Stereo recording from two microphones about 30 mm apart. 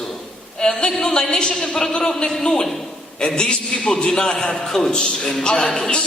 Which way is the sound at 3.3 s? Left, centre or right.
Left.